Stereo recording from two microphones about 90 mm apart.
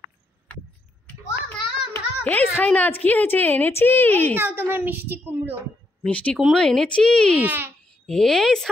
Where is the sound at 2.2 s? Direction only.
20° left (ahead or behind).